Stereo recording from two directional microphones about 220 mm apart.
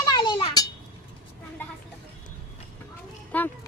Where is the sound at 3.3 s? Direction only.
5° left (ahead or behind).